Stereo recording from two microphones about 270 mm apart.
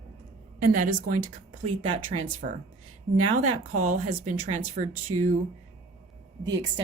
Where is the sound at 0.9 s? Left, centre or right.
Right.